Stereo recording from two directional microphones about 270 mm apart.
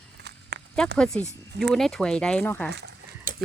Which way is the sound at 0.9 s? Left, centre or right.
Centre.